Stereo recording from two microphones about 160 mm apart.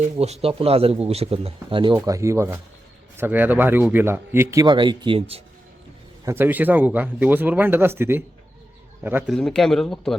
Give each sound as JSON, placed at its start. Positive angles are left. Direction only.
{"t": 0.2, "sound": "speech", "side_deg": -40}
{"t": 2.0, "sound": "speech", "side_deg": -20}
{"t": 4.6, "sound": "speech", "side_deg": -30}
{"t": 6.2, "sound": "speech", "side_deg": -15}
{"t": 9.3, "sound": "speech", "side_deg": 5}